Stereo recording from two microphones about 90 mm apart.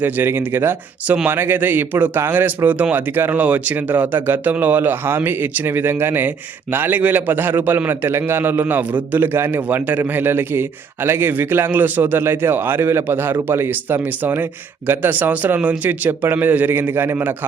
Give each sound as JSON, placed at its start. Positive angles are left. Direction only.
{"t": 0.0, "sound": "speech", "side_deg": -25}